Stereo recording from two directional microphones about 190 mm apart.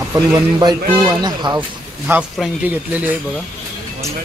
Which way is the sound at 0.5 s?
20° right (ahead or behind).